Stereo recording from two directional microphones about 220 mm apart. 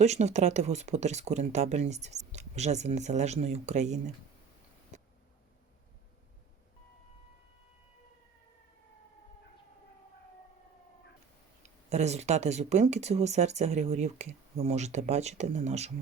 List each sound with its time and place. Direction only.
0.0 s speech: 30° right (ahead or behind)
4.9 s tick: 30° right (ahead or behind)
11.9 s speech: 30° right (ahead or behind)